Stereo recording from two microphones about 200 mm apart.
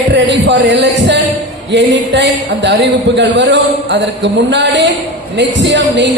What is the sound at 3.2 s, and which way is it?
Speech, 60° right (ahead or behind).